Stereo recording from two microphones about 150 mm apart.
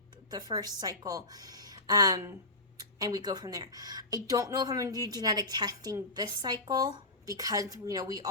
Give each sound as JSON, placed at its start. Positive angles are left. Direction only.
{"t": 0.3, "sound": "speech", "side_deg": -25}